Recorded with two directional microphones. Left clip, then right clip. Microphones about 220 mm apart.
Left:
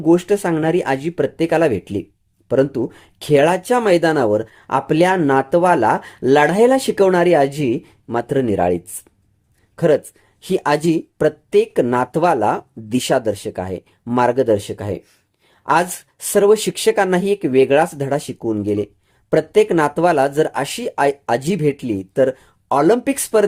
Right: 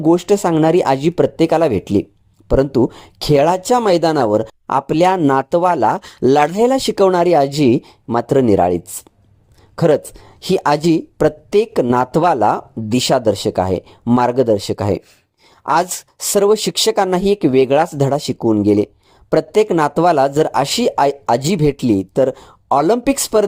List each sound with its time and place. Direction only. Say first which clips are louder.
0.0 s speech: right 2 dB; 25° right (ahead or behind)